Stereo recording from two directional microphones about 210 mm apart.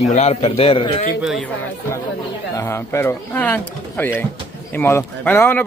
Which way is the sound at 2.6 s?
10° left (ahead or behind).